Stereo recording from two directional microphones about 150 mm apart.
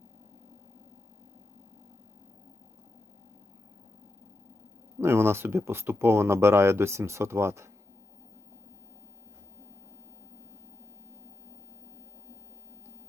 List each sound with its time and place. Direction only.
4.9 s speech: 15° right (ahead or behind)